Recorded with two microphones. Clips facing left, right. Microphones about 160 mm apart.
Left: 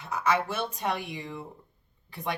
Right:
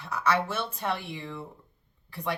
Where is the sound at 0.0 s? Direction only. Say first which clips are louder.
Even; 20° left (ahead or behind).